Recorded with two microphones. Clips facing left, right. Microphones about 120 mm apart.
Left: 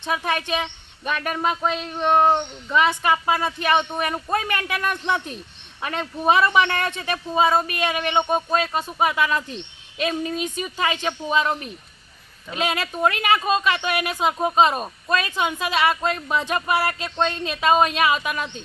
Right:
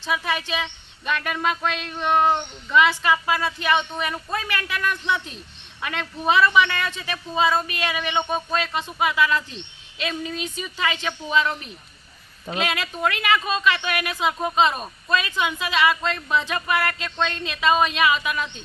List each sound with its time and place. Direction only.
0.1 s speech: 50° left (ahead or behind)
1.7 s a sound: 5° left (ahead or behind)
2.0 s speech: 35° left (ahead or behind)
3.4 s speech: 45° left (ahead or behind)
5.8 s speech: 40° left (ahead or behind)